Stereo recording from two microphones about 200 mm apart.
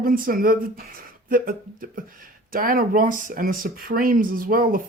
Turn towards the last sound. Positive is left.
turn(degrees=-45)  # may be behind; listen again after turning